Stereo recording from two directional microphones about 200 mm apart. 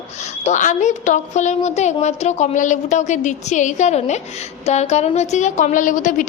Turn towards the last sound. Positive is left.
turn(degrees=40)  # may be behind; listen again after turning